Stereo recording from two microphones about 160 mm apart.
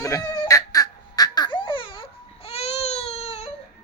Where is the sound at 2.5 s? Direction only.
40° left (ahead or behind).